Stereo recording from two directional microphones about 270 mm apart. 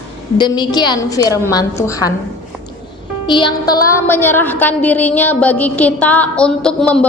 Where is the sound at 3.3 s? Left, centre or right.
Centre.